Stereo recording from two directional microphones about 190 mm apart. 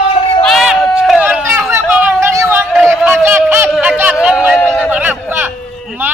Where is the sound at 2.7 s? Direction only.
Centre (ahead or behind).